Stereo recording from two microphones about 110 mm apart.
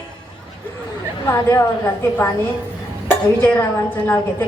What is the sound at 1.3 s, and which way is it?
Speech, 25° left (ahead or behind).